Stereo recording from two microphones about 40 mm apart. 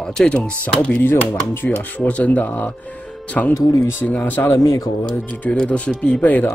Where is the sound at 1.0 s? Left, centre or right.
Left.